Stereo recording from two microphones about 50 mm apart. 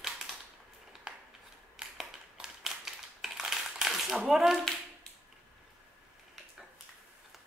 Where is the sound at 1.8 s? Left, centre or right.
Centre.